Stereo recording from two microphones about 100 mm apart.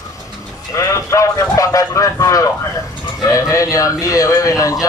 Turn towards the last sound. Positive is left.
turn(degrees=35)  # may be behind; listen again after turning